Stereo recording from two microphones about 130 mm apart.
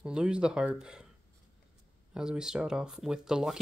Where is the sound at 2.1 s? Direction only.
5° right (ahead or behind).